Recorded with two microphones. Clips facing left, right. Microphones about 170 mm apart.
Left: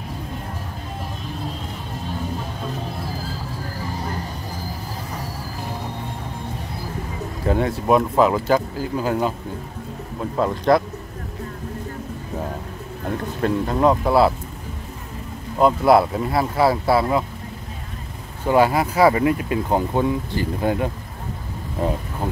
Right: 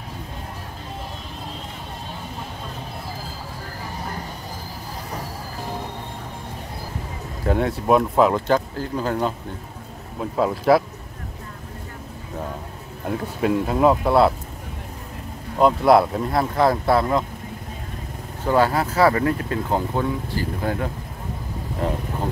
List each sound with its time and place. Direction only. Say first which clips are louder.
7.4 s speech: even; centre (ahead or behind)
10.3 s speech: even; 5° right (ahead or behind)
13.2 s speech: right 1 dB; 5° right (ahead or behind)
15.6 s speech: even; centre (ahead or behind)
18.5 s speech: left 2 dB; 15° left (ahead or behind)